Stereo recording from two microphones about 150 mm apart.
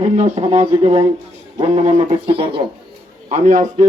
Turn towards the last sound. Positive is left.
turn(degrees=-55)  # may be behind; listen again after turning